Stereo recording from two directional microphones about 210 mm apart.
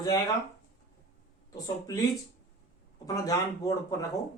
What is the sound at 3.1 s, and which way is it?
Speech, 15° left (ahead or behind).